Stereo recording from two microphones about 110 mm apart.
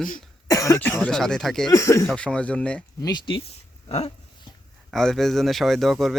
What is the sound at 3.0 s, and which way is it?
Speech, 45° left (ahead or behind).